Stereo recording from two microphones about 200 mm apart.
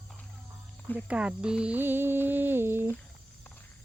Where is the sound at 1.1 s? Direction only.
5° right (ahead or behind).